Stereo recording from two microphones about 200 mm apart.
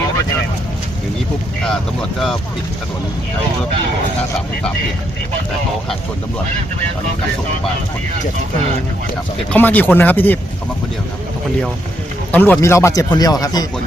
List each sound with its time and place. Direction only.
1.6 s speech: 5° left (ahead or behind)
9.5 s speech: 10° left (ahead or behind)
12.3 s speech: 10° left (ahead or behind)